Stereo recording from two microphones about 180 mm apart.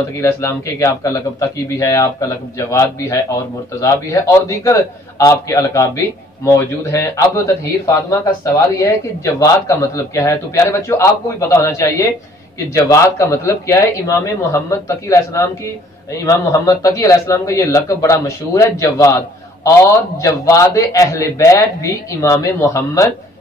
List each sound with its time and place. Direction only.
0.2 s a man's voice: 15° left (ahead or behind)